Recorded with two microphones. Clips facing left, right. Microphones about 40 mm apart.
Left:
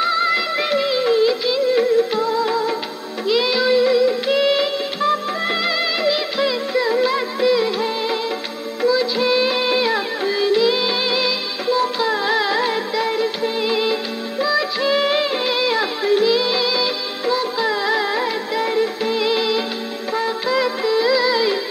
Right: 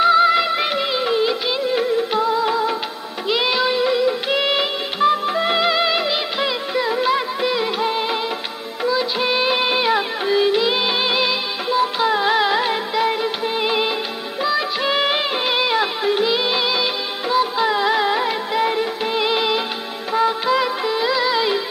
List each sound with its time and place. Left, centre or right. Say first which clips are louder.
0.0 s music: right 4 dB; centre
2.0 s music: left 1 dB; centre